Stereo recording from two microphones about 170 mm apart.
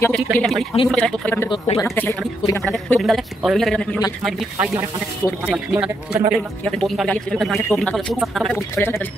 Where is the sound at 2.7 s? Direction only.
Centre (ahead or behind).